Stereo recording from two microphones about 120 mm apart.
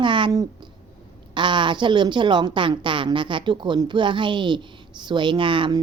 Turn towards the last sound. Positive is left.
turn(degrees=-45)  # may be behind; listen again after turning